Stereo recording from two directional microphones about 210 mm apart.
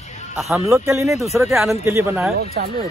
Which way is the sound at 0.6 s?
15° right (ahead or behind).